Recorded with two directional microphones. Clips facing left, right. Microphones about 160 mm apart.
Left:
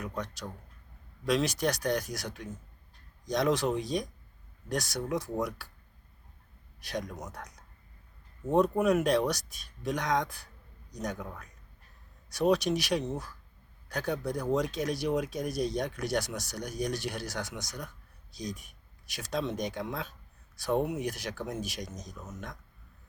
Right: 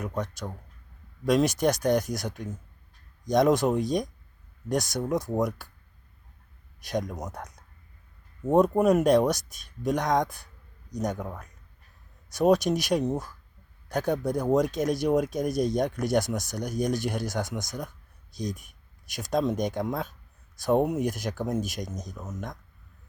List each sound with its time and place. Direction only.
0.0 s speech: 45° right (ahead or behind)
6.8 s speech: 45° right (ahead or behind)
8.5 s speech: 45° right (ahead or behind)